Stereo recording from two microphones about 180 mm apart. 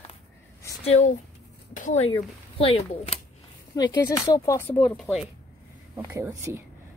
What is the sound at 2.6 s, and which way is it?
Speech, 30° left (ahead or behind).